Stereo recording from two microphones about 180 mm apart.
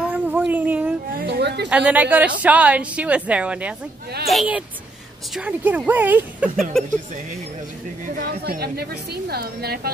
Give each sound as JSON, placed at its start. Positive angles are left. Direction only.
{"t": 0.0, "sound": "a sound", "side_deg": -10}
{"t": 1.1, "sound": "chatter", "side_deg": -65}
{"t": 1.7, "sound": "a woman's voice", "side_deg": -5}
{"t": 8.2, "sound": "a woman's voice", "side_deg": -55}